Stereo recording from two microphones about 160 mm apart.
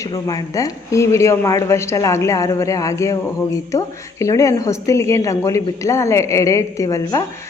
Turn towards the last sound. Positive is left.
turn(degrees=20)  # may be behind; listen again after turning